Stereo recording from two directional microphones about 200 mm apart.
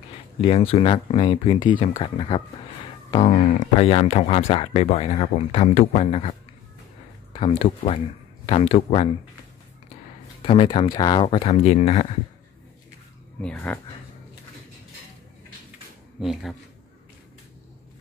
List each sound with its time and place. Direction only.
0.4 s speech: 30° left (ahead or behind)
7.3 s speech: 30° left (ahead or behind)
10.4 s speech: 25° left (ahead or behind)
13.4 s speech: 5° left (ahead or behind)
16.2 s speech: centre (ahead or behind)